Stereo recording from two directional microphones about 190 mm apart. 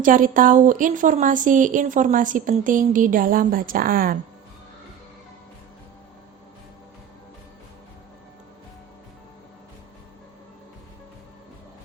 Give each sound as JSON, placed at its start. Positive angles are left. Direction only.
{"t": 0.0, "sound": "a woman's voice", "side_deg": -45}